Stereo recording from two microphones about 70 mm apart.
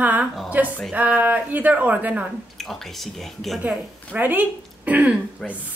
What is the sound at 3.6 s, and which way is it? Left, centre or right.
A woman's voice, right.